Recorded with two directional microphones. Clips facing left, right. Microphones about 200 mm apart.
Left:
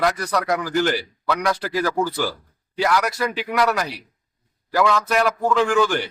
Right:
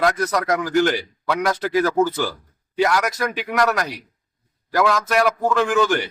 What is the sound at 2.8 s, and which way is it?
A man's voice, centre (ahead or behind).